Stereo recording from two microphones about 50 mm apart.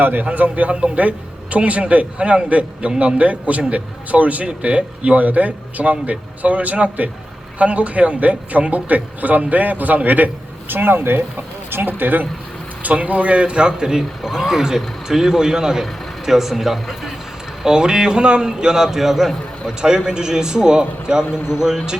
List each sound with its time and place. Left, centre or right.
0.0 s a man's voice: right
10.7 s speech: right
12.8 s a man's voice: right; by 17.1 s centre
17.6 s a man's voice: centre